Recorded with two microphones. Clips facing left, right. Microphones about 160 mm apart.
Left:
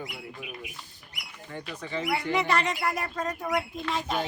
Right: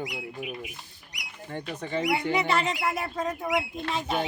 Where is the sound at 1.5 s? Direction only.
30° right (ahead or behind).